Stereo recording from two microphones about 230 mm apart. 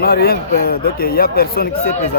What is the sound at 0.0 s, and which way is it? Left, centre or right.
Speech, left.